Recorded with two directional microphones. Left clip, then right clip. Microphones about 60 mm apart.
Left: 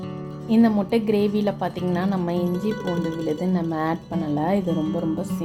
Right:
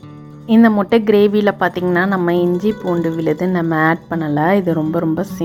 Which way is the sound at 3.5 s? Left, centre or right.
Right.